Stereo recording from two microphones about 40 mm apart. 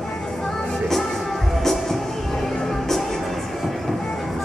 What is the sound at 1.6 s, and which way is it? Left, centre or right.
Music, centre.